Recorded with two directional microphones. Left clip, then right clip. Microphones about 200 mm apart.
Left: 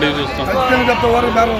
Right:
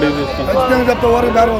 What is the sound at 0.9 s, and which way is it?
Speech, 40° right (ahead or behind).